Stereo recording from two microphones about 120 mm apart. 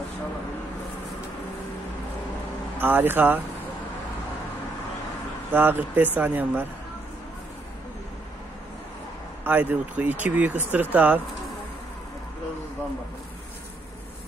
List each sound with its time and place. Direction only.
2.8 s speech: 15° right (ahead or behind)
5.5 s speech: 15° right (ahead or behind)
9.4 s speech: 15° right (ahead or behind)